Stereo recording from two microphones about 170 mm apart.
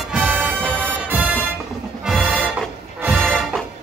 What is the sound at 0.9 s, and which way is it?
Music, 10° right (ahead or behind).